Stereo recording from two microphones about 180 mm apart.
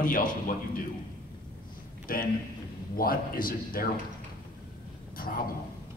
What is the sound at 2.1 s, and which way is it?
A man's voice, 50° left (ahead or behind).